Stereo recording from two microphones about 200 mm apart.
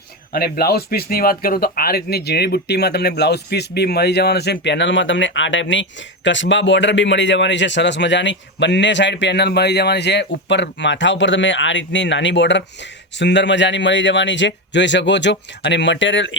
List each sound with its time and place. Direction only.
0.3 s speech: 50° left (ahead or behind); by 16.4 s 65° left (ahead or behind)